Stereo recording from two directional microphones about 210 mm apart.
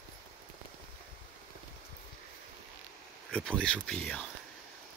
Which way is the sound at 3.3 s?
5° left (ahead or behind).